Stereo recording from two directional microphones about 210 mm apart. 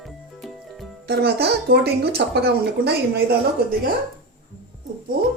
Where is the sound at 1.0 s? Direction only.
50° right (ahead or behind).